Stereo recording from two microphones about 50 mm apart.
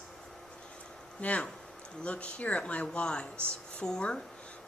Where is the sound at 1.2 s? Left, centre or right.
Left.